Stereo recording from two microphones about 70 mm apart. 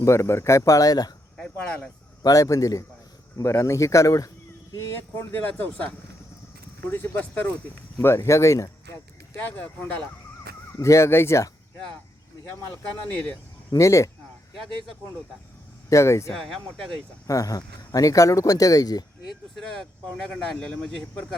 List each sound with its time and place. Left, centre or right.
0.0 s speech: left
1.4 s a sound: centre
2.2 s speech: left
4.8 s speech: left
6.9 s speech: left
9.5 s speech: left
10.8 s speech: left
13.7 s speech: left
15.9 s speech: left
16.3 s speech: centre
17.2 s speech: left
19.3 s speech: centre